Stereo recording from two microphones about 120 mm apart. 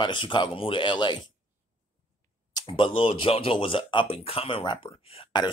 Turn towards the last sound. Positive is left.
turn(degrees=45)  # may be behind; listen again after turning